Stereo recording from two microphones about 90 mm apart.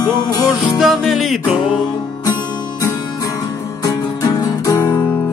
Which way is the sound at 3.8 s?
45° left (ahead or behind).